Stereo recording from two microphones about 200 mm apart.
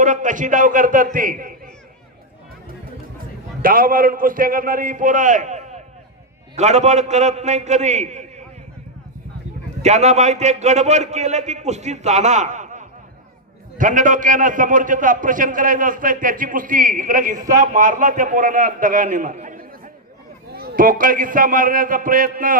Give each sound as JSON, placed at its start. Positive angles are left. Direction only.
{"t": 0.0, "sound": "a man's voice", "side_deg": -40}
{"t": 3.6, "sound": "a man's voice", "side_deg": -45}
{"t": 9.8, "sound": "a man's voice", "side_deg": -35}